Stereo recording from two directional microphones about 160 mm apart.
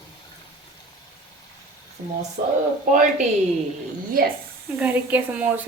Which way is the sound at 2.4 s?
55° right (ahead or behind).